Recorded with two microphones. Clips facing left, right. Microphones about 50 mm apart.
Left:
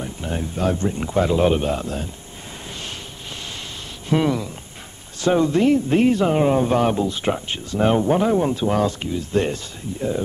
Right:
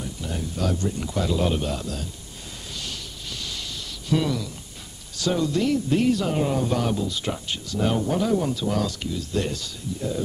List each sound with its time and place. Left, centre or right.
0.0 s speech: left
4.1 s speech: left